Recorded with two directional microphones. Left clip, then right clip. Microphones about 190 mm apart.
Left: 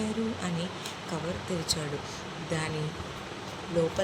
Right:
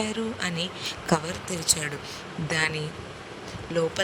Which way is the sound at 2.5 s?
50° right (ahead or behind).